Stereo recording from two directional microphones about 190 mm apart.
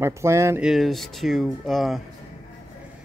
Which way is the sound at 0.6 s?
Centre (ahead or behind).